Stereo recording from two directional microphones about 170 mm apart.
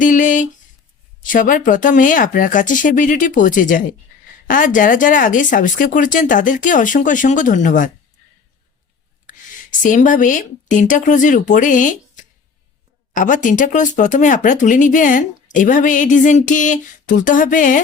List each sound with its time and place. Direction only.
0.0 s a sound: 50° left (ahead or behind)
1.2 s speech: 50° left (ahead or behind)
9.8 s speech: 50° left (ahead or behind)